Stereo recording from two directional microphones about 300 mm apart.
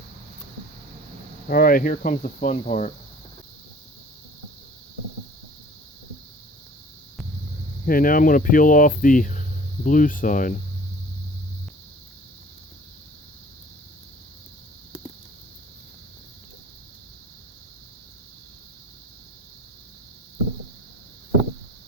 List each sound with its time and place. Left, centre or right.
1.5 s speech: left
7.9 s speech: left